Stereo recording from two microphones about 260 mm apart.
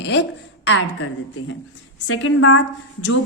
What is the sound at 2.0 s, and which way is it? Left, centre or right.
Speech, left.